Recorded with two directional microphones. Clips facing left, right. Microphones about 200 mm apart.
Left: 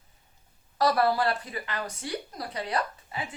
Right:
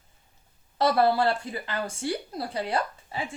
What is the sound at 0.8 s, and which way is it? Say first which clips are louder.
A woman's voice: right 2 dB; 25° right (ahead or behind).